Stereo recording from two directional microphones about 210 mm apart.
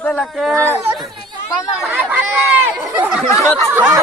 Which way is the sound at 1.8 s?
5° right (ahead or behind).